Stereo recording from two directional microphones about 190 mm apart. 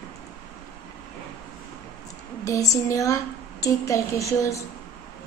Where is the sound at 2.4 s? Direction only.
15° left (ahead or behind).